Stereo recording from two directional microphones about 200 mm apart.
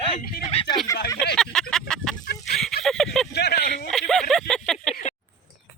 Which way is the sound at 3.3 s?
55° left (ahead or behind).